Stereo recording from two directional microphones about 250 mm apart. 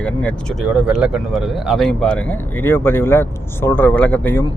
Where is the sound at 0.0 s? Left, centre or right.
Centre.